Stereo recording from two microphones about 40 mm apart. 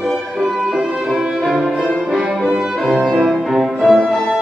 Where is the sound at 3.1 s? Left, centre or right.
Centre.